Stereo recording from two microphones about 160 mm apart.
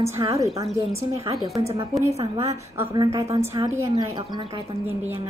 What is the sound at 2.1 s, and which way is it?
Speech, 35° right (ahead or behind).